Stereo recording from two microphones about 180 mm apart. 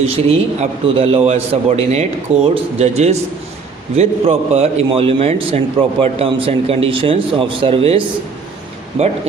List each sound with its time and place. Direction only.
0.0 s a man's voice: 35° right (ahead or behind)